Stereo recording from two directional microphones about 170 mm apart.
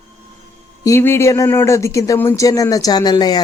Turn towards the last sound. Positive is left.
turn(degrees=25)  # may be behind; listen again after turning